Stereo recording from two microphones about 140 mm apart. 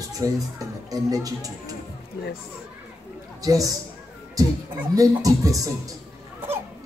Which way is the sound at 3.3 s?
25° right (ahead or behind).